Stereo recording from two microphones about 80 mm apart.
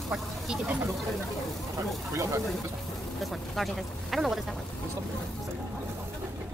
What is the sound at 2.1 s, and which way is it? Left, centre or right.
Speech, right.